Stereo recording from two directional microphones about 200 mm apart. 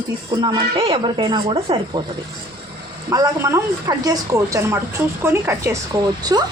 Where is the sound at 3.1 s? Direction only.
15° right (ahead or behind).